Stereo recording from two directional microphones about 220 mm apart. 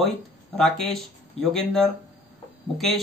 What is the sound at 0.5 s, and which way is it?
Speech, centre (ahead or behind).